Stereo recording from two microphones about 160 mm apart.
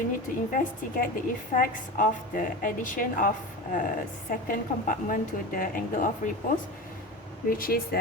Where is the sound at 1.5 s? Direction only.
60° left (ahead or behind).